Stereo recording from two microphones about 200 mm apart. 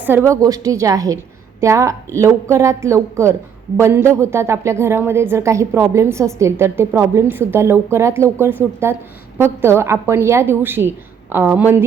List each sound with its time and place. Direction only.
0.0 s a woman's voice: 10° right (ahead or behind)